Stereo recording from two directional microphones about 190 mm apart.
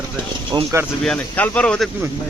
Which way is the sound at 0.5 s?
15° right (ahead or behind).